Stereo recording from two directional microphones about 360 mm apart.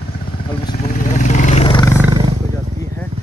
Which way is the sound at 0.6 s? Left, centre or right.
Left.